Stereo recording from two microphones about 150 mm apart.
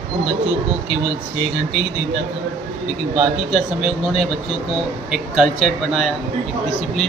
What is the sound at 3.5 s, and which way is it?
Speech, 5° right (ahead or behind).